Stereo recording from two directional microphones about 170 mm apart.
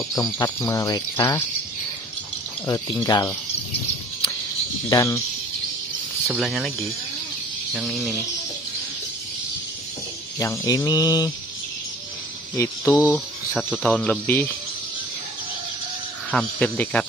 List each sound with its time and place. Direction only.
0.1 s speech: 20° left (ahead or behind)
2.6 s speech: 20° left (ahead or behind)
4.8 s speech: 20° left (ahead or behind)
6.2 s speech: centre (ahead or behind)
7.7 s speech: centre (ahead or behind)
10.4 s speech: 15° left (ahead or behind)
12.5 s speech: 15° left (ahead or behind)
13.0 s speech: centre (ahead or behind)
16.3 s speech: 10° left (ahead or behind)